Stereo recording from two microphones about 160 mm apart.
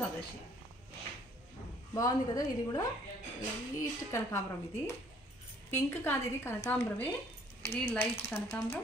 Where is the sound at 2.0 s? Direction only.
20° left (ahead or behind).